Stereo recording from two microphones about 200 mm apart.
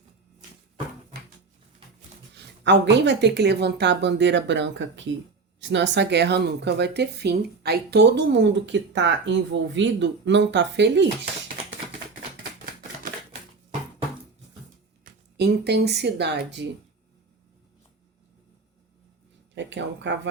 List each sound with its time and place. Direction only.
2.3 s speech: 60° right (ahead or behind)
15.1 s a sound: 45° right (ahead or behind)
15.4 s speech: 55° right (ahead or behind)
19.5 s speech: 65° right (ahead or behind)